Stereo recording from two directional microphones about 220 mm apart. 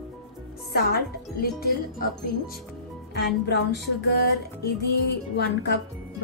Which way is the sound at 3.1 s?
50° left (ahead or behind).